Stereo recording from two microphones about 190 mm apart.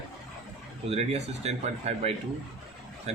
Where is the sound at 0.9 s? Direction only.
35° right (ahead or behind).